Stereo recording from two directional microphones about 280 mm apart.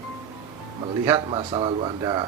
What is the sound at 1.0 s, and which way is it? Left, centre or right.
Speech, centre.